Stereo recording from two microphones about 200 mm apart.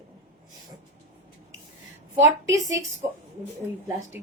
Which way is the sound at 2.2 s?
15° right (ahead or behind).